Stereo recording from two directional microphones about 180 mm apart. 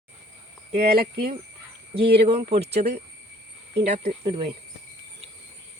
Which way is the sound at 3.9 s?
35° right (ahead or behind).